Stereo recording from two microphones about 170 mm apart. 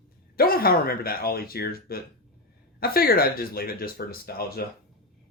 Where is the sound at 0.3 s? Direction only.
60° left (ahead or behind).